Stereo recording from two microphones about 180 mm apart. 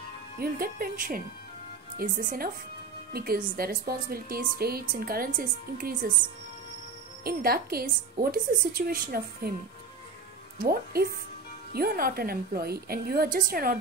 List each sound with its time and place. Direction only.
0.4 s a woman's voice: 55° right (ahead or behind)
7.2 s a woman's voice: 55° right (ahead or behind)
10.6 s a woman's voice: 55° right (ahead or behind)